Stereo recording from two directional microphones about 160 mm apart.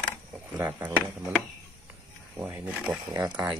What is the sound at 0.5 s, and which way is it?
Speech, 15° right (ahead or behind).